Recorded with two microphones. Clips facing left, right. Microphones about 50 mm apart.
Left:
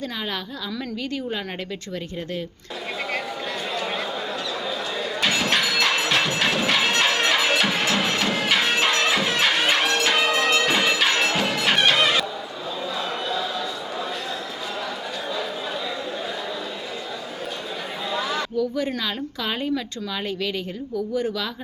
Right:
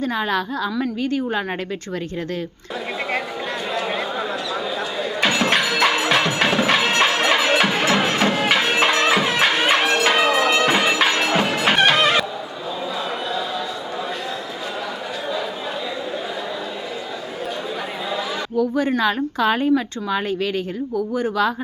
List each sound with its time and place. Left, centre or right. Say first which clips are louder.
0.0 s speech: right 8 dB; right
3.8 s a sound: right 5 dB; centre
5.2 s music: right 4 dB; right
8.6 s music: right 3 dB; right
18.1 s chatter: left 1 dB; centre
18.5 s speech: right 9 dB; right